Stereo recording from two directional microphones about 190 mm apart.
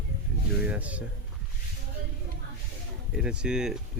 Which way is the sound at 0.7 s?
5° right (ahead or behind).